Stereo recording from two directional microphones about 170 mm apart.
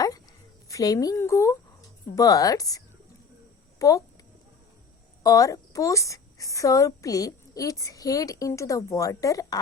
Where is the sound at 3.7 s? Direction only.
20° left (ahead or behind).